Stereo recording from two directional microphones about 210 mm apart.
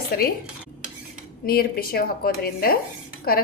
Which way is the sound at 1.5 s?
45° left (ahead or behind).